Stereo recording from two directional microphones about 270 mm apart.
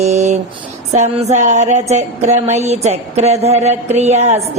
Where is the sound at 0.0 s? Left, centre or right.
Right.